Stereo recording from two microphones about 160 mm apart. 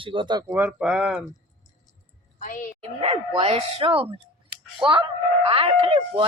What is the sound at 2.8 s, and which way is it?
Speech, 40° right (ahead or behind).